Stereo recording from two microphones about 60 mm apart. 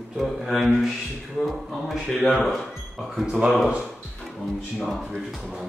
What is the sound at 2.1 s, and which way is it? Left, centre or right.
Speech, centre.